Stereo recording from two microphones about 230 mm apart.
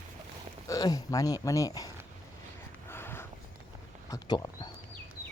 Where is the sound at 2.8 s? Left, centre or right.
Centre.